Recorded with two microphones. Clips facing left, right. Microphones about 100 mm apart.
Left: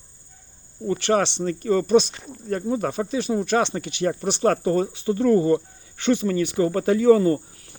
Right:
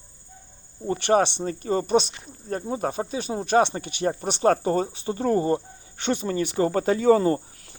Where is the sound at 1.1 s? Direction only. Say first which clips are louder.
Right 1 dB; 50° right (ahead or behind).